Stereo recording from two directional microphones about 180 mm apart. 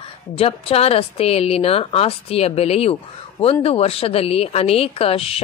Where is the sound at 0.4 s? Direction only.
30° left (ahead or behind).